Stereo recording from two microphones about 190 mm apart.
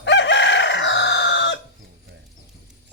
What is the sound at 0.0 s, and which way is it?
Chicken, 70° left (ahead or behind).